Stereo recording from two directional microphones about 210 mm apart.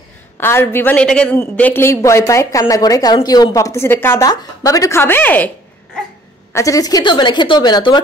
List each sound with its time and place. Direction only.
0.4 s a woman's voice: 10° left (ahead or behind)
6.5 s speech: 15° left (ahead or behind)